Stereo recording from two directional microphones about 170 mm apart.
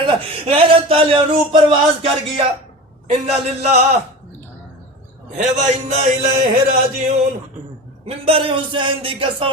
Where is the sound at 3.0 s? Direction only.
40° right (ahead or behind).